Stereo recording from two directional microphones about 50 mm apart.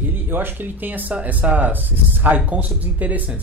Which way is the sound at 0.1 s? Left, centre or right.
Right.